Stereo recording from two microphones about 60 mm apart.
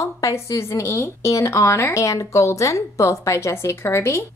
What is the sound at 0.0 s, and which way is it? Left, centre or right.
A woman's voice, left.